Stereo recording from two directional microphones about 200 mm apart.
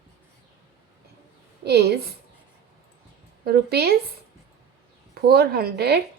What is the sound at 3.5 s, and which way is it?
Speech, 50° right (ahead or behind).